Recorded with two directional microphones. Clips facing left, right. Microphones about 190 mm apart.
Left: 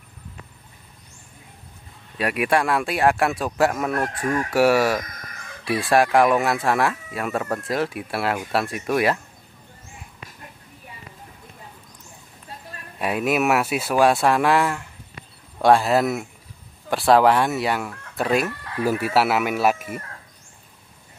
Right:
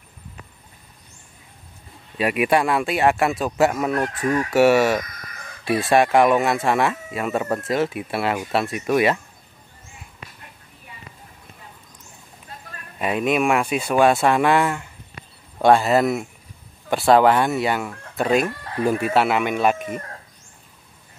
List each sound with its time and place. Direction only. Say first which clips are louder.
2.1 s speech: right 2 dB; 5° right (ahead or behind)
13.0 s speech: right 1 dB; 5° left (ahead or behind)
18.6 s a sound: right 2 dB; 35° right (ahead or behind)
18.9 s speech: right 1 dB; 5° left (ahead or behind)